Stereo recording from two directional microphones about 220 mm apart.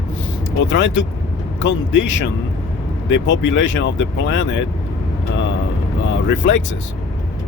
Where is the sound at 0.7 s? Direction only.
55° left (ahead or behind).